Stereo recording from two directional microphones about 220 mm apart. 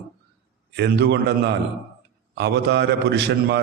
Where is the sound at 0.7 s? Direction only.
50° right (ahead or behind).